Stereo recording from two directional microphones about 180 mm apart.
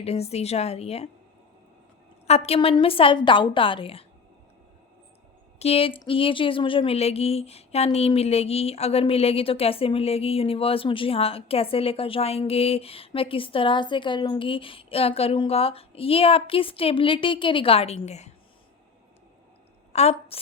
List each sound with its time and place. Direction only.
0.0 s speech: 35° left (ahead or behind)
2.2 s speech: 35° left (ahead or behind)
5.5 s speech: 35° left (ahead or behind)
19.9 s a woman's voice: 35° left (ahead or behind)